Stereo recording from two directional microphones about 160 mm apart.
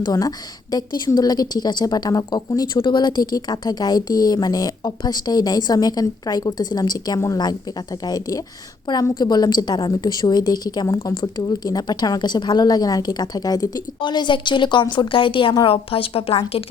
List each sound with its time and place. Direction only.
0.0 s a woman's voice: 25° left (ahead or behind)